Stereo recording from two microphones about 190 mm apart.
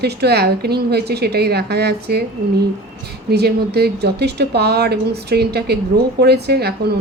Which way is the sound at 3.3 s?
60° right (ahead or behind).